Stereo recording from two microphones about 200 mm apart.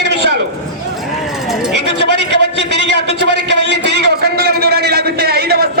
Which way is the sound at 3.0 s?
60° right (ahead or behind).